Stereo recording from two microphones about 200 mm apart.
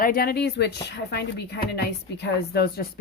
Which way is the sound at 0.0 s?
45° left (ahead or behind).